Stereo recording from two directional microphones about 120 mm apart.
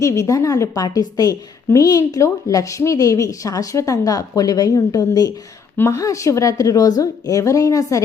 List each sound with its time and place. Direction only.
0.0 s a woman's voice: 25° left (ahead or behind)